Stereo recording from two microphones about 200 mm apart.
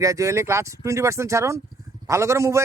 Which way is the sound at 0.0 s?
15° right (ahead or behind).